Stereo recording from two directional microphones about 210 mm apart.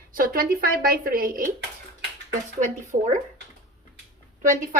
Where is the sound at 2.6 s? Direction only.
35° right (ahead or behind).